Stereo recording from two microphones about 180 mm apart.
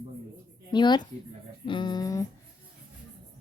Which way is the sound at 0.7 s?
25° left (ahead or behind).